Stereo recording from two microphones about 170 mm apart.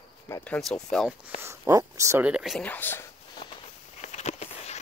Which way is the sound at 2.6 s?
10° left (ahead or behind).